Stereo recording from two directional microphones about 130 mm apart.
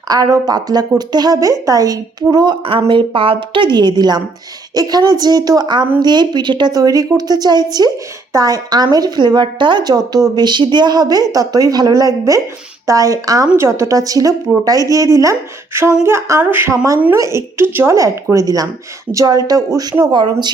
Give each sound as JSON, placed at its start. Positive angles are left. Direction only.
{"t": 0.1, "sound": "a woman's voice", "side_deg": -30}